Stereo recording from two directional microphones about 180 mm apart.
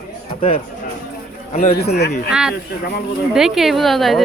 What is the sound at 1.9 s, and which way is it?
Speech, 65° left (ahead or behind).